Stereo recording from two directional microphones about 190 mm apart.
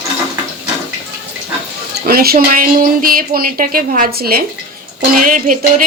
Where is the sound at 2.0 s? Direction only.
55° right (ahead or behind).